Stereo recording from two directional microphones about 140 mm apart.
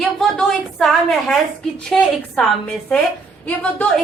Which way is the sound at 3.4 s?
10° left (ahead or behind).